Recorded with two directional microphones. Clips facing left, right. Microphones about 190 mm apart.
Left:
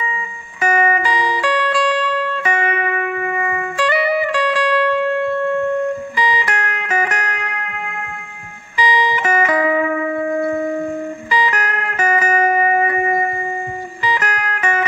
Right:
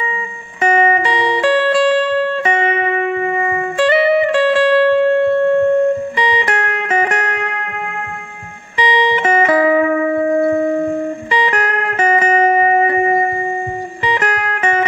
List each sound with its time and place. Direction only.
0.6 s music: 25° right (ahead or behind)
8.7 s music: 25° right (ahead or behind)